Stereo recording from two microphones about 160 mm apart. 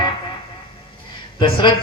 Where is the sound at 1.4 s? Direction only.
30° left (ahead or behind).